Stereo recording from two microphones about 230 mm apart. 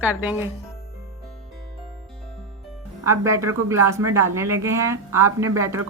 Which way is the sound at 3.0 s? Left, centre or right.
Centre.